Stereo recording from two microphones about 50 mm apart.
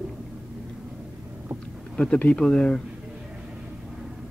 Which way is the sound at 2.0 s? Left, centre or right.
Left.